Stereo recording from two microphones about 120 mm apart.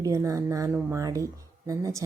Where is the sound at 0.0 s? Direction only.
25° right (ahead or behind).